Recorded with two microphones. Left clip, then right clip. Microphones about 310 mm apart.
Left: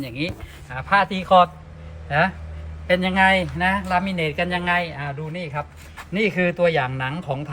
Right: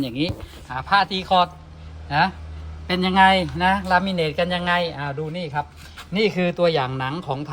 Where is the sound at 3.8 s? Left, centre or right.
Centre.